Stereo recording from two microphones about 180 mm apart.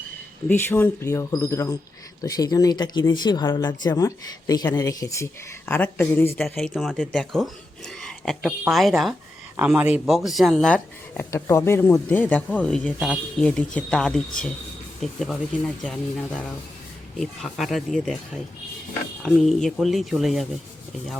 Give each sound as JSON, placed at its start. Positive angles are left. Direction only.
{"t": 0.4, "sound": "speech", "side_deg": 10}
{"t": 19.2, "sound": "speech", "side_deg": 0}